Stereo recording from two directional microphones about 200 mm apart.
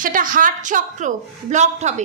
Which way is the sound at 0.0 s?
45° right (ahead or behind).